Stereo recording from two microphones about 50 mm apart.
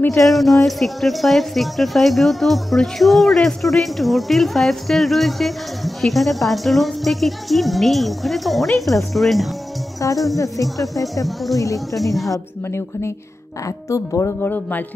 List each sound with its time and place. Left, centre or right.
0.2 s speech: centre
10.0 s speech: left
12.3 s speech: left
13.7 s speech: left
14.4 s a man's voice: left